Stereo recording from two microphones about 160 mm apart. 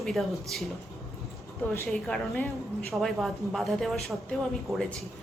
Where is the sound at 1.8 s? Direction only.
5° left (ahead or behind).